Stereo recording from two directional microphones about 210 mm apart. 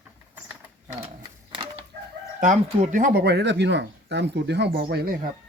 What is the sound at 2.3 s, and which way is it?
Speech, 35° right (ahead or behind).